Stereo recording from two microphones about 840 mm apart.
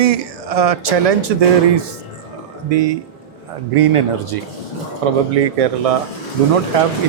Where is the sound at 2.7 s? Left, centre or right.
Right.